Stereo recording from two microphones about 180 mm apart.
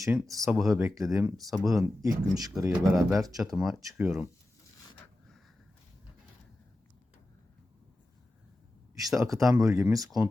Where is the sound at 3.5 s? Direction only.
Centre (ahead or behind).